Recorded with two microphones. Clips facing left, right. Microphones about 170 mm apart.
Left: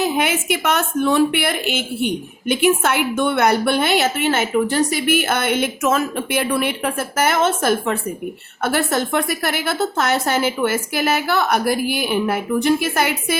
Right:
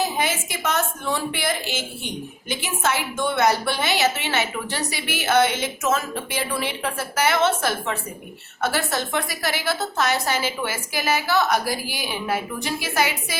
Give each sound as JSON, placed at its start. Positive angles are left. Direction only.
{"t": 0.0, "sound": "a woman's voice", "side_deg": 65}